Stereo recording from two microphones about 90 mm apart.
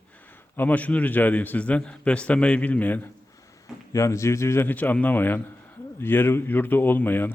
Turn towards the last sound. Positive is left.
turn(degrees=20)  # may be behind; listen again after turning